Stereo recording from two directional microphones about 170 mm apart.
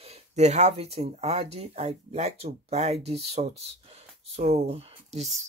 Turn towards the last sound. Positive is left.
turn(degrees=-40)  # may be behind; listen again after turning